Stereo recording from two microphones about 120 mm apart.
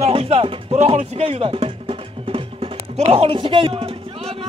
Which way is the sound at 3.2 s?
45° right (ahead or behind).